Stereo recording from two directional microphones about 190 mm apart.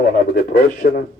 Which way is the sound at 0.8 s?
50° left (ahead or behind).